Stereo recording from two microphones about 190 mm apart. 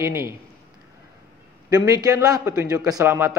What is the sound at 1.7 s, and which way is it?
A man's voice, 20° right (ahead or behind).